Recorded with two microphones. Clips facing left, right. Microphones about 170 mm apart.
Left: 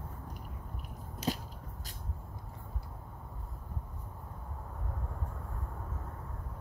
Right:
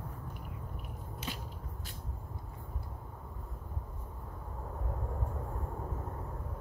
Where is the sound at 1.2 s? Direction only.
40° left (ahead or behind).